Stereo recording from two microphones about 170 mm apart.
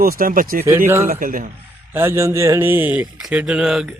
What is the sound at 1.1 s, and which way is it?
Speech, 55° right (ahead or behind).